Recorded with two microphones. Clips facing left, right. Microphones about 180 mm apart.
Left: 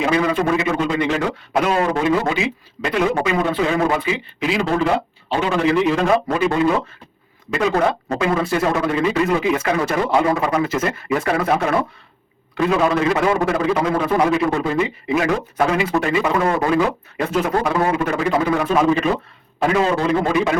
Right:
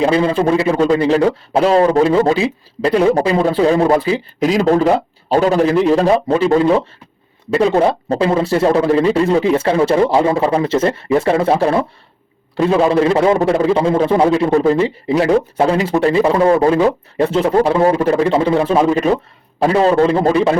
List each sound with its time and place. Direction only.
0.0 s a man's voice: 30° right (ahead or behind)